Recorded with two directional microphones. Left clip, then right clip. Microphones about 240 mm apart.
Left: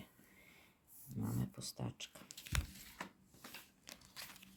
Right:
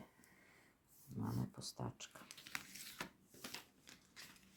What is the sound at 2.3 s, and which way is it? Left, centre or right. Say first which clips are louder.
Biting: left 4 dB; centre.